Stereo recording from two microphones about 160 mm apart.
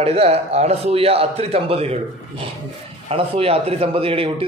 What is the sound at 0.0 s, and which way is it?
A man's voice, 40° right (ahead or behind).